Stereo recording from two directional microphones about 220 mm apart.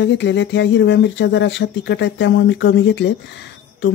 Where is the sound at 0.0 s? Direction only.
55° left (ahead or behind).